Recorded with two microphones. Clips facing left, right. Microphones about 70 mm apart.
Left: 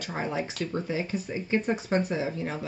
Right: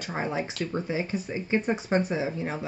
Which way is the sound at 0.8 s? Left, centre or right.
Right.